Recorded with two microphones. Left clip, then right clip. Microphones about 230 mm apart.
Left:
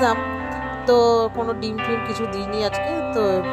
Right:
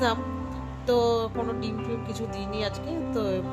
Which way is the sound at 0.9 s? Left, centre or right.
Left.